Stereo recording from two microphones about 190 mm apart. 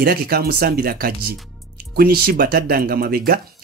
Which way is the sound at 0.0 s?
55° right (ahead or behind).